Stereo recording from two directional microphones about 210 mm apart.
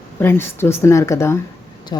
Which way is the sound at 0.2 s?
10° left (ahead or behind).